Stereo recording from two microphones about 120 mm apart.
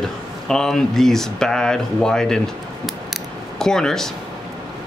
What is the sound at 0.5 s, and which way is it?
Speech, 5° left (ahead or behind).